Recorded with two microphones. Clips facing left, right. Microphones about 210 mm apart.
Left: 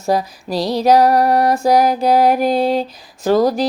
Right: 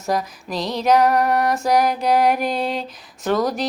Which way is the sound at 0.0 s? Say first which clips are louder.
Left 5 dB; 30° left (ahead or behind).